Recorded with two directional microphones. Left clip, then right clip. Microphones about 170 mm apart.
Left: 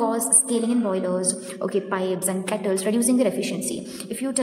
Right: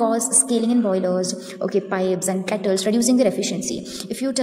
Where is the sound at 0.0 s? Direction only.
20° right (ahead or behind).